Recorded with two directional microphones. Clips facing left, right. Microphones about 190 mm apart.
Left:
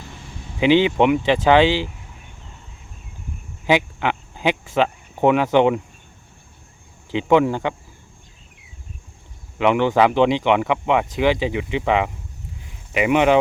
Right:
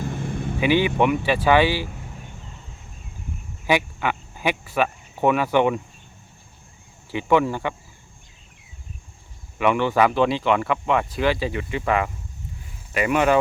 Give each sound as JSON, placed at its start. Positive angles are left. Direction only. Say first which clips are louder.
{"t": 0.0, "sound": "vehicle", "louder": "right 11 dB", "side_deg": -55}
{"t": 0.6, "sound": "speech", "louder": "left 4 dB", "side_deg": 20}
{"t": 3.7, "sound": "speech", "louder": "left 3 dB", "side_deg": 20}
{"t": 7.1, "sound": "speech", "louder": "left 3 dB", "side_deg": 20}
{"t": 9.6, "sound": "speech", "louder": "left 3 dB", "side_deg": 15}